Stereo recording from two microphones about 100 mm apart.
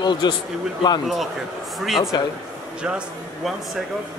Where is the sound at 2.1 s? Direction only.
45° left (ahead or behind).